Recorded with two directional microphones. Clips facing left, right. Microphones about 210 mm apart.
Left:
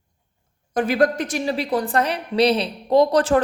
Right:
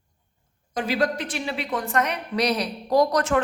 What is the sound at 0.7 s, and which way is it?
A woman's voice, 50° left (ahead or behind).